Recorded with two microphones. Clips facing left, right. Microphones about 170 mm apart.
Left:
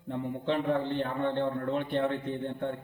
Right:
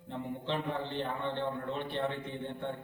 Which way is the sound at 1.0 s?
50° left (ahead or behind).